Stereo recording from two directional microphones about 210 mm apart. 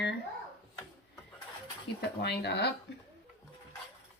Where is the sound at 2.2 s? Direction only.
50° left (ahead or behind).